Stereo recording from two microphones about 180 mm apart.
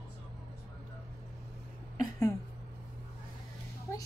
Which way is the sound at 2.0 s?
15° left (ahead or behind).